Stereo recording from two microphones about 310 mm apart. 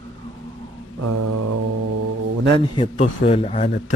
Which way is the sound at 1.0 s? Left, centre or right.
Right.